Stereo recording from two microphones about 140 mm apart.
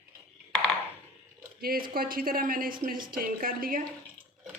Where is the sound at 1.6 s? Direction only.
90° right.